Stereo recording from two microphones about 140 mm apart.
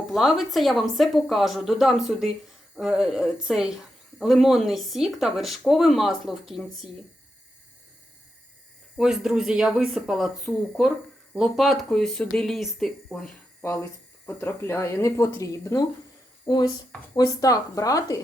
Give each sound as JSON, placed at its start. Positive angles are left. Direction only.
{"t": 0.1, "sound": "speech", "side_deg": 0}
{"t": 9.0, "sound": "speech", "side_deg": -5}
{"t": 13.6, "sound": "speech", "side_deg": 20}